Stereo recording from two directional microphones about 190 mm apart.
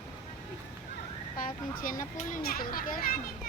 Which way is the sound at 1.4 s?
45° left (ahead or behind).